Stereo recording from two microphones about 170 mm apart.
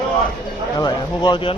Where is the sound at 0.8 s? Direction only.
25° left (ahead or behind).